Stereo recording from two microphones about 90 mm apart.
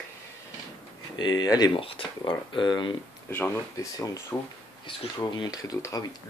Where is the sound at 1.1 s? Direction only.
55° left (ahead or behind).